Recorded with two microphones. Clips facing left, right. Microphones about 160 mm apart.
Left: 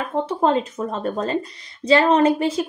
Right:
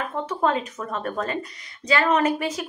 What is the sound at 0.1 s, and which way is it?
A woman's voice, 30° left (ahead or behind).